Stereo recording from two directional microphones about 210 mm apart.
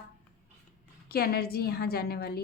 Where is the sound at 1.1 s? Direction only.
45° left (ahead or behind).